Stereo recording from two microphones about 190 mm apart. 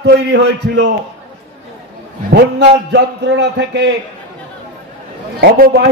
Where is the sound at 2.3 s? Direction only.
60° right (ahead or behind).